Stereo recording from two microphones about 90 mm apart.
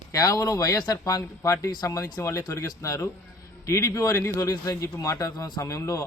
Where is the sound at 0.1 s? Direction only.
40° left (ahead or behind).